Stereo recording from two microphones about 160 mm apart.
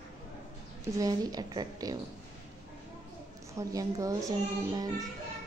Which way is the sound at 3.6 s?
20° right (ahead or behind).